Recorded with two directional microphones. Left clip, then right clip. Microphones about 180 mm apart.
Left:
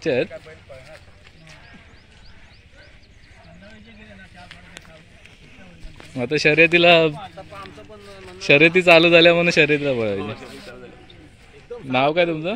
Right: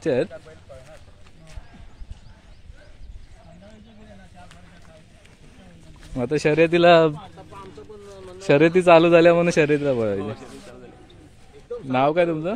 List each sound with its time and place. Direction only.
0.0 s speech: 20° right (ahead or behind)
6.1 s speech: 15° right (ahead or behind)
8.5 s a man's voice: 15° right (ahead or behind)
11.9 s a man's voice: 15° right (ahead or behind)